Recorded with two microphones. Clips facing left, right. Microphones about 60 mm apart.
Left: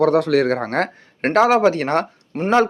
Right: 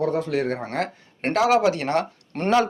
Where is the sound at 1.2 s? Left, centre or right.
Left.